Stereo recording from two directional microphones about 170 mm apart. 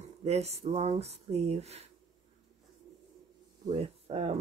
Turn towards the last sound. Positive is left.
turn(degrees=-35)  # may be behind; listen again after turning